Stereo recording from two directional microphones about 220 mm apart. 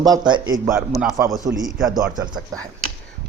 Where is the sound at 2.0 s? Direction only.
15° right (ahead or behind).